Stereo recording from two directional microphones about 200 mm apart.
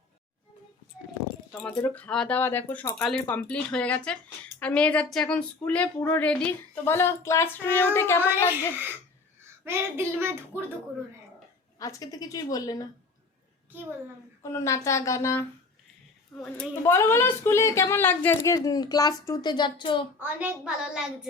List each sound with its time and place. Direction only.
1.6 s a woman's voice: 10° left (ahead or behind)
9.4 s speech: 10° right (ahead or behind)
11.8 s a woman's voice: 15° left (ahead or behind)
14.5 s a woman's voice: 15° left (ahead or behind)
16.4 s a woman's voice: centre (ahead or behind)
16.8 s a woman's voice: 15° left (ahead or behind)
20.1 s a woman's voice: 10° right (ahead or behind)